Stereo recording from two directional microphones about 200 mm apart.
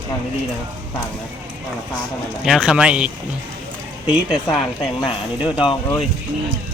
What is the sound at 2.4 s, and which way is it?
Speech, 5° right (ahead or behind).